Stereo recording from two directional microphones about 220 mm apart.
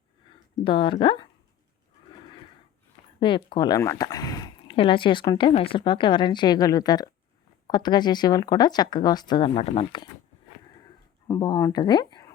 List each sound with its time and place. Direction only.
0.6 s speech: 20° left (ahead or behind)
3.2 s speech: 20° left (ahead or behind)
11.3 s speech: 15° left (ahead or behind)